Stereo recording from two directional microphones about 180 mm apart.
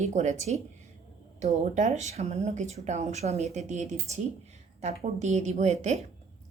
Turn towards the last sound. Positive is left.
turn(degrees=-40)  # may be behind; listen again after turning